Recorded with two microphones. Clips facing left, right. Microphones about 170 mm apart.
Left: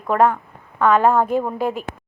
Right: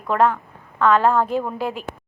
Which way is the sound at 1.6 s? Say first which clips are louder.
Left 3 dB; 50° left (ahead or behind).